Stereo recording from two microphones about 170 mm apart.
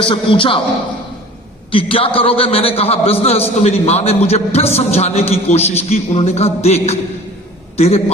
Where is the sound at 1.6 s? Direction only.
30° left (ahead or behind).